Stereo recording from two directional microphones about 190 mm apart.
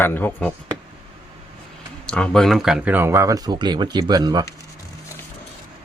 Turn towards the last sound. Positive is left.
turn(degrees=-20)  # may be behind; listen again after turning